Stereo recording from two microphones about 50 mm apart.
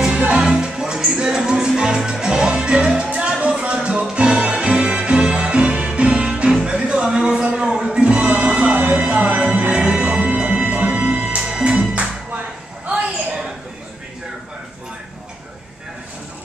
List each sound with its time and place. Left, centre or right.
0.4 s music: centre
8.7 s music: right